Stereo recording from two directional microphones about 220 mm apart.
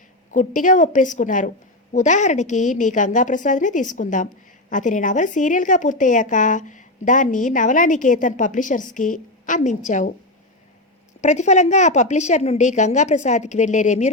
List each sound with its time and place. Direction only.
0.3 s a woman's voice: 35° left (ahead or behind)
11.2 s a woman's voice: 30° left (ahead or behind)